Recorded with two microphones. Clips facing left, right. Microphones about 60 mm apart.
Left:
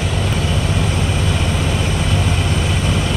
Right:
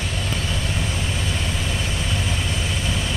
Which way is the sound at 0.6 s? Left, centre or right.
Left.